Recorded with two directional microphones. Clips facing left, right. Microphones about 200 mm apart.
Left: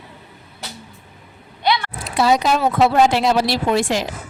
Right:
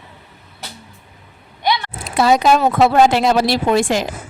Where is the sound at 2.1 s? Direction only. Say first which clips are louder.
Right 3 dB; 50° right (ahead or behind).